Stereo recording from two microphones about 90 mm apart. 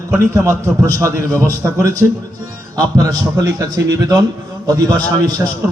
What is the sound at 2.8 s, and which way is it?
A man's voice, 45° right (ahead or behind).